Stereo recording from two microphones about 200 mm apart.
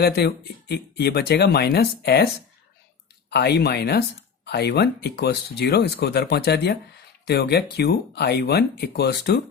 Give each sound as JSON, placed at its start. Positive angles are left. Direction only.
{"t": 0.0, "sound": "speech", "side_deg": 55}